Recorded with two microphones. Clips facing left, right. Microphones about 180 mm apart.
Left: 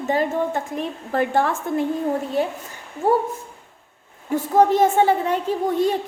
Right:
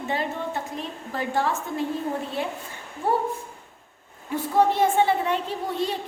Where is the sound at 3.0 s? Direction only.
45° left (ahead or behind).